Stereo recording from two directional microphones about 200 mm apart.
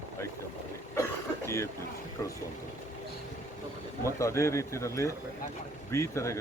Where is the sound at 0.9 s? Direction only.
15° left (ahead or behind).